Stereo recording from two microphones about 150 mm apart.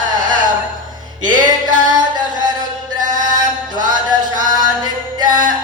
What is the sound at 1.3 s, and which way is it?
Music, 65° right (ahead or behind).